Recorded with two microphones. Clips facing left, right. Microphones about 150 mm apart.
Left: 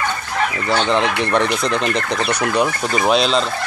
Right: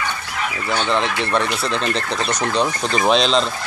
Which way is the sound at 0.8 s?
15° left (ahead or behind).